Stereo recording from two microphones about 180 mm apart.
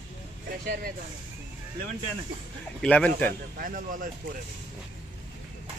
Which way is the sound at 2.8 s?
5° left (ahead or behind).